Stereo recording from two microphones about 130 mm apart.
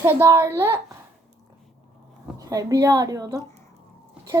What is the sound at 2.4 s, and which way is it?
A woman's voice, 25° right (ahead or behind).